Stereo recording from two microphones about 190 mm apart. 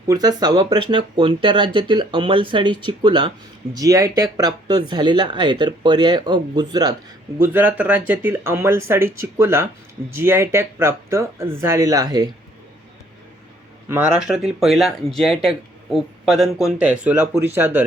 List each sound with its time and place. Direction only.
0.1 s speech: 20° right (ahead or behind)
7.3 s speech: 10° right (ahead or behind)
13.8 s speech: 10° right (ahead or behind)